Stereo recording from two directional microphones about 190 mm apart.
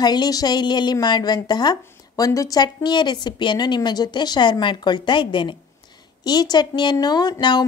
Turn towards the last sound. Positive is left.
turn(degrees=20)  # may be behind; listen again after turning